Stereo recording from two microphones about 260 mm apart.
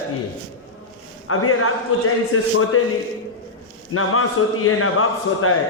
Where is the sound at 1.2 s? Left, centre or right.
Left.